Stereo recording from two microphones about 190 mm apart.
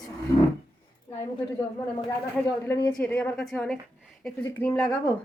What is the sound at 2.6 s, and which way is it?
A woman's voice, 10° left (ahead or behind).